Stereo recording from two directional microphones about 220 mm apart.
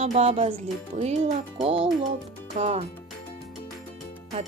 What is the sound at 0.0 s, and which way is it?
Speech, 30° right (ahead or behind).